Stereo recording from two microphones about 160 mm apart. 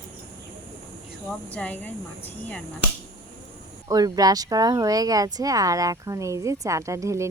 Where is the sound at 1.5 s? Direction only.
10° left (ahead or behind).